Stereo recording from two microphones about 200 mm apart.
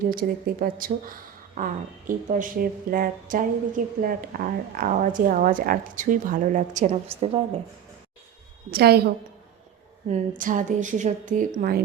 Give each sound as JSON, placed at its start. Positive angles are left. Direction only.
{"t": 0.1, "sound": "a woman's voice", "side_deg": -45}
{"t": 8.7, "sound": "a woman's voice", "side_deg": -50}